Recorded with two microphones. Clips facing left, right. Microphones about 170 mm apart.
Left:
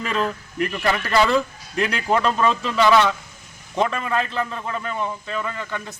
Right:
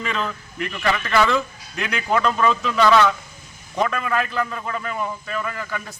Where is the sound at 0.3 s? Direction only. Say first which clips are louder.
Left 4 dB; 40° left (ahead or behind).